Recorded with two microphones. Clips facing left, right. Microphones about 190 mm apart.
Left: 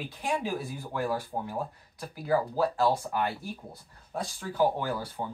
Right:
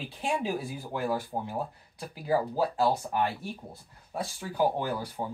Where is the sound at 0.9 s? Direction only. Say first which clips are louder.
Even; 20° right (ahead or behind).